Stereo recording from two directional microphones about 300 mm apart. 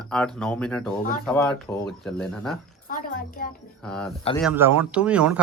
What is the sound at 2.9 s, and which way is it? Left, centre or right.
Speech, left.